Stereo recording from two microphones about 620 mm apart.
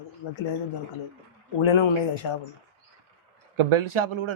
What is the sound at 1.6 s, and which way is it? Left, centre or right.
Speech, left.